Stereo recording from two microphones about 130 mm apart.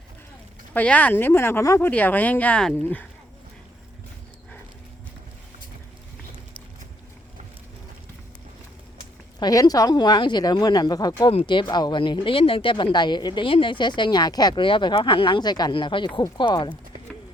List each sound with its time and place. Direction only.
0.7 s speech: 10° left (ahead or behind)
9.4 s speech: 30° left (ahead or behind)
11.3 s speech: 45° left (ahead or behind)